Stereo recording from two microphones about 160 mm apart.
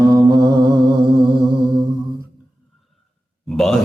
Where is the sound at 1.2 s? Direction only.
30° right (ahead or behind).